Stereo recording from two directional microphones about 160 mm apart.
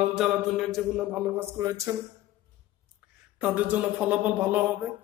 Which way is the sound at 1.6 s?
15° right (ahead or behind).